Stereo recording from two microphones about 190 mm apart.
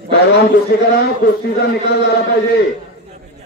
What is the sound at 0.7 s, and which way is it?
Music, 60° left (ahead or behind).